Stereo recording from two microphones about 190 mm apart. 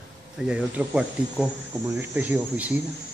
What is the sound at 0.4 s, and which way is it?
Speech, 5° right (ahead or behind).